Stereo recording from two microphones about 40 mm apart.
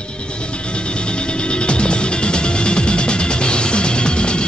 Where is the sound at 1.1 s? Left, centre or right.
Left.